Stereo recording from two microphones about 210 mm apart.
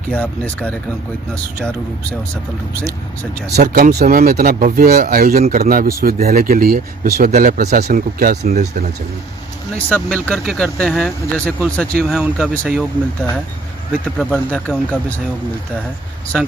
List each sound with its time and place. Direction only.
0.1 s speech: 5° left (ahead or behind)
3.5 s speech: 45° right (ahead or behind)
9.7 s speech: 5° left (ahead or behind)